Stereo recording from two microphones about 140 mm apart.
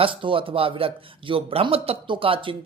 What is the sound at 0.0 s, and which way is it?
A man's voice, 40° right (ahead or behind).